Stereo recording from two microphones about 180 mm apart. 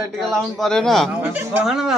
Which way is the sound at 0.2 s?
Centre (ahead or behind).